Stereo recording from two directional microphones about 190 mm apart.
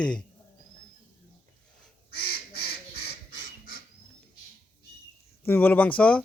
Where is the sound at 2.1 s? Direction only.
55° left (ahead or behind).